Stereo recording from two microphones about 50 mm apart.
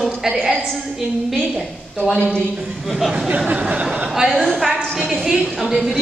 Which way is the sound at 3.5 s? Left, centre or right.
Right.